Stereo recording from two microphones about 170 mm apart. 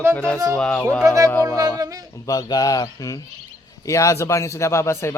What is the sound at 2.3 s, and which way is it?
Speech, 20° left (ahead or behind).